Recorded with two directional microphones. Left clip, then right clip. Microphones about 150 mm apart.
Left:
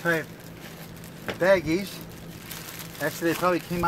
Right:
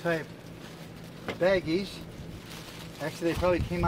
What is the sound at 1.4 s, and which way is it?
Speech, 15° left (ahead or behind).